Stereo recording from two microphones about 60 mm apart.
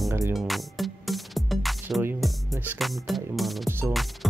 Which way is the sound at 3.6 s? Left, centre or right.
Right.